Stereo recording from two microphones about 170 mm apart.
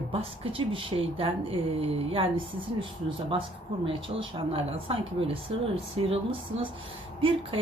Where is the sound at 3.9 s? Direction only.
30° right (ahead or behind).